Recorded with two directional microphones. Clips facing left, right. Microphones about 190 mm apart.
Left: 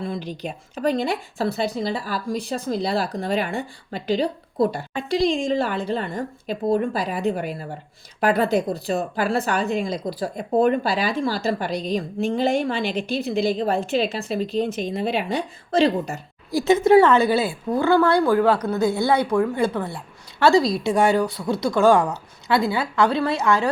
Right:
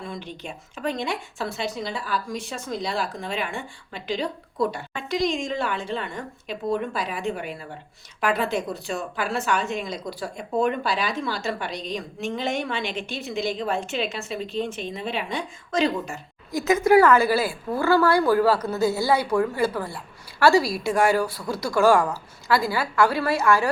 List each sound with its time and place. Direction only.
0.0 s a woman's voice: 35° left (ahead or behind); by 17.9 s 20° left (ahead or behind)
17.9 s a woman's voice: 5° right (ahead or behind)
21.4 s speech: 25° left (ahead or behind)
22.4 s a woman's voice: centre (ahead or behind)
23.4 s a woman's voice: 20° left (ahead or behind)